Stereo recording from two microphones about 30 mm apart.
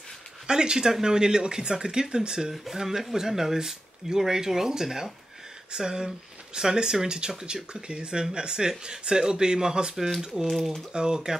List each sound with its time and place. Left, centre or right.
0.5 s speech: right
2.5 s speech: centre; by 11.3 s right